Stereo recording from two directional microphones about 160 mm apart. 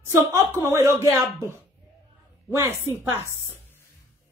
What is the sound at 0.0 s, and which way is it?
A woman's voice, 20° right (ahead or behind).